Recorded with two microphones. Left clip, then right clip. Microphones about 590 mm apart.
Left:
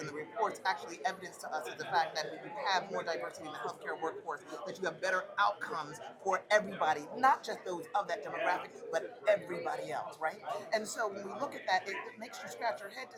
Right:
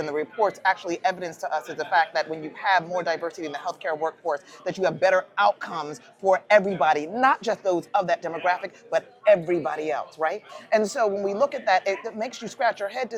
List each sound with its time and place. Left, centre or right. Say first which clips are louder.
0.4 s speech: right 11 dB; right